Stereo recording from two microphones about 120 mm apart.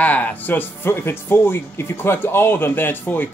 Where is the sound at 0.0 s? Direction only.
15° left (ahead or behind).